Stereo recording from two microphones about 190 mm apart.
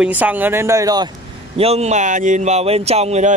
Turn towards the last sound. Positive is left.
turn(degrees=-35)  # may be behind; listen again after turning